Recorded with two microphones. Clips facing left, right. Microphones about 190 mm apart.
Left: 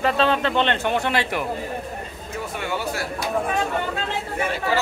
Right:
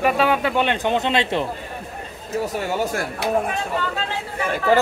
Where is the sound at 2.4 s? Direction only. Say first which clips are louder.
Right 4 dB; 40° right (ahead or behind).